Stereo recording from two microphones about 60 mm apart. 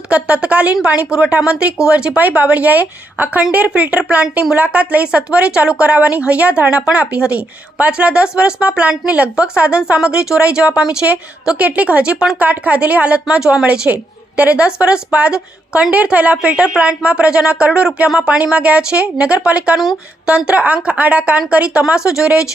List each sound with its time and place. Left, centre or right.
0.1 s a woman's voice: right